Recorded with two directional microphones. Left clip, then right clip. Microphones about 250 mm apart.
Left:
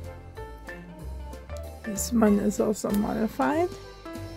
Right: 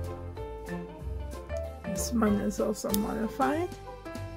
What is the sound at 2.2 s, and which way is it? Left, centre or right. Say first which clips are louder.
Speech: left 6 dB; left.